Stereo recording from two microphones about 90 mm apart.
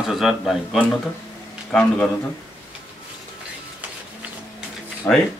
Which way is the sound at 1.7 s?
10° left (ahead or behind).